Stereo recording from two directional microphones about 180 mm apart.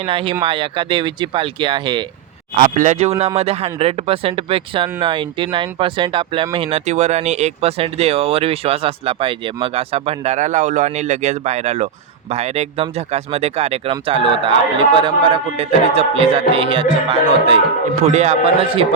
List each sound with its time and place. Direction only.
0.0 s speech: 30° right (ahead or behind)
2.6 s speech: 45° right (ahead or behind)